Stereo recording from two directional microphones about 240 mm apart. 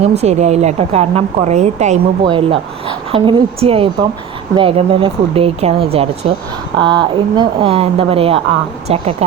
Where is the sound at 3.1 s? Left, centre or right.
Right.